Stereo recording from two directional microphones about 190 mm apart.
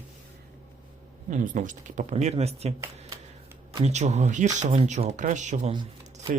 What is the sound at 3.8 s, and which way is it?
Speech, 35° right (ahead or behind).